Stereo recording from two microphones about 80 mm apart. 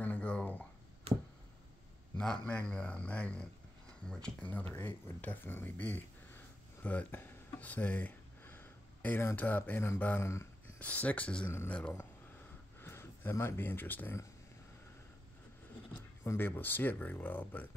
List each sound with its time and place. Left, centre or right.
0.0 s a sound: centre
2.1 s a man's voice: centre
4.5 s speech: left
10.2 s speech: left
10.8 s speech: centre
12.8 s speech: left
16.3 s speech: left